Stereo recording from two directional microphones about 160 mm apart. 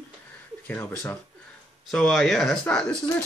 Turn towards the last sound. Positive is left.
turn(degrees=5)  # may be behind; listen again after turning